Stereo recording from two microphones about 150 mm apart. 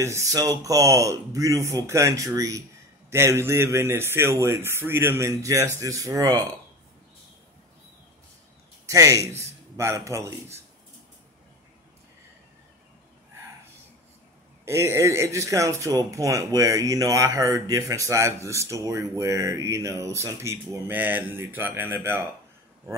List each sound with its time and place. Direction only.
0.0 s a man's voice: 20° right (ahead or behind)
8.8 s a man's voice: 20° right (ahead or behind)
14.6 s speech: 15° right (ahead or behind)